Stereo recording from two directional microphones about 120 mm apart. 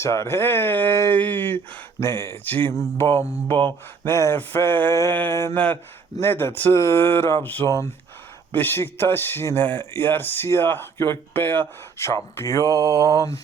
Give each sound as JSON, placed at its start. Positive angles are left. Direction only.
{"t": 0.0, "sound": "speech", "side_deg": 25}
{"t": 7.7, "sound": "speech", "side_deg": 25}
{"t": 12.6, "sound": "mantra", "side_deg": -30}